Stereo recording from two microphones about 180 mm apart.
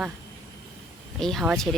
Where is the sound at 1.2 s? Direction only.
Centre (ahead or behind).